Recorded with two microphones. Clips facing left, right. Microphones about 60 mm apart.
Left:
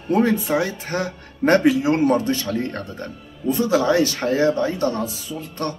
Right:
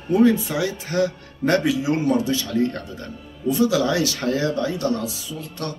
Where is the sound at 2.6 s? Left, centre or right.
Left.